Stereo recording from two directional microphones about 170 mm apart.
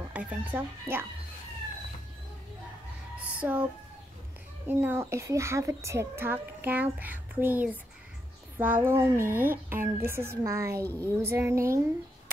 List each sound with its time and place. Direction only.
0.1 s a woman's voice: 10° right (ahead or behind)
3.3 s a child's voice: 10° right (ahead or behind)
4.6 s a woman's voice: 15° right (ahead or behind)